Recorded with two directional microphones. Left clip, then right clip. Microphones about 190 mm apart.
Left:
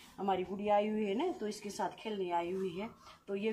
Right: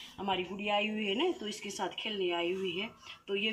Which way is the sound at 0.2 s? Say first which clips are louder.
Even; 15° left (ahead or behind).